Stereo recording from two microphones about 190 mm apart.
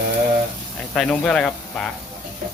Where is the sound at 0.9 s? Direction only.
5° left (ahead or behind).